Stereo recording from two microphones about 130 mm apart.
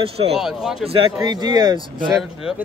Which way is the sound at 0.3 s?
5° right (ahead or behind).